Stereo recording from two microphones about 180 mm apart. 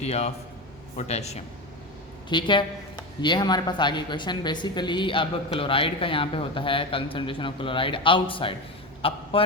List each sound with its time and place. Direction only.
0.0 s a man's voice: 35° left (ahead or behind)
2.3 s speech: 25° left (ahead or behind)
9.0 s a sound: 30° left (ahead or behind)